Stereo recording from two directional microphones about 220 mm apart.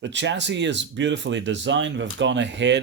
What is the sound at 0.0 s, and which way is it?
Speech, 55° right (ahead or behind).